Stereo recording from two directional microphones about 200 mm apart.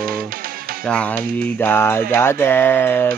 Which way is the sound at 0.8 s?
5° left (ahead or behind).